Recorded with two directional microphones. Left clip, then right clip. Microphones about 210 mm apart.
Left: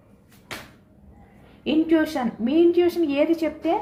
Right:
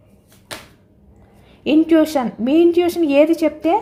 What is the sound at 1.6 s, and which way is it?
A woman's voice, 50° right (ahead or behind).